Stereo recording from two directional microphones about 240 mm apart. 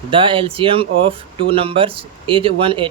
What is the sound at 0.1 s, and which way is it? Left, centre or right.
Speech, right.